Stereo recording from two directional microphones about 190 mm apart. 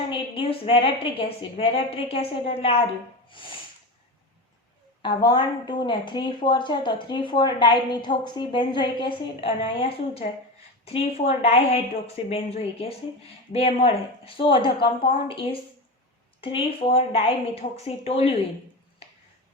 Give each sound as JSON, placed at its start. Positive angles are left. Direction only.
{"t": 0.1, "sound": "a woman's voice", "side_deg": 30}
{"t": 5.0, "sound": "a woman's voice", "side_deg": 20}
{"t": 10.8, "sound": "a woman's voice", "side_deg": 30}